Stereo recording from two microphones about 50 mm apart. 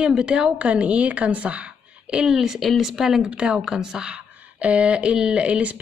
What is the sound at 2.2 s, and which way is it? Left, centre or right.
A woman's voice, centre.